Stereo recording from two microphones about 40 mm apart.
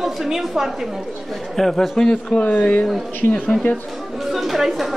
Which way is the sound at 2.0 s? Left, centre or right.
Left.